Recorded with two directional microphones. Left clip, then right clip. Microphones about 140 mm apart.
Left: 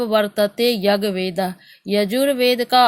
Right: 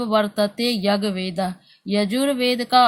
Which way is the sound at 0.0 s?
35° left (ahead or behind).